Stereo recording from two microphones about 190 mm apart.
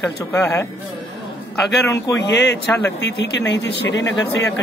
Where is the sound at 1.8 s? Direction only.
15° left (ahead or behind).